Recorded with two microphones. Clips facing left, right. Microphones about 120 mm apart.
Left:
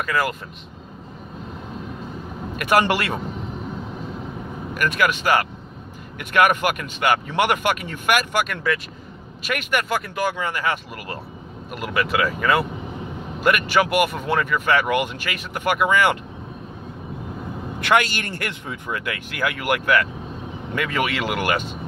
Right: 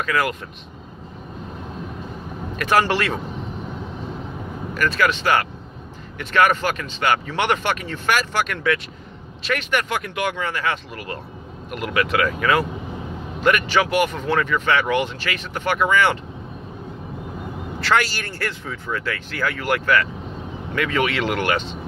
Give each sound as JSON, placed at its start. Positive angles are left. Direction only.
{"t": 2.5, "sound": "speech", "side_deg": 10}
{"t": 4.7, "sound": "speech", "side_deg": 15}
{"t": 17.7, "sound": "speech", "side_deg": 20}